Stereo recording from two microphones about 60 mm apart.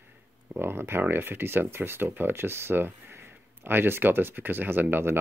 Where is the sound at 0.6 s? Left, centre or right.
Right.